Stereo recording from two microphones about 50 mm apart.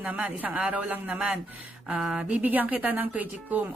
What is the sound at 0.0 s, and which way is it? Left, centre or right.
Speech, right.